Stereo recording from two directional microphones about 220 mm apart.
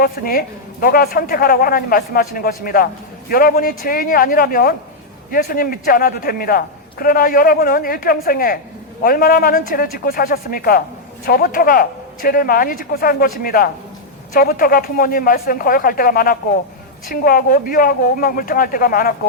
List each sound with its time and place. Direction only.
0.0 s a woman's voice: 40° left (ahead or behind)